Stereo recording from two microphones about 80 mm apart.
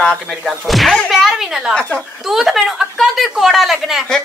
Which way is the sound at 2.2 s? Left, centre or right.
Centre.